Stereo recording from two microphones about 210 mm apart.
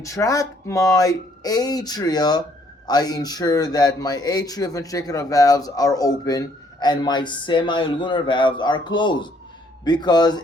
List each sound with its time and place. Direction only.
0.0 s a man's voice: 15° left (ahead or behind)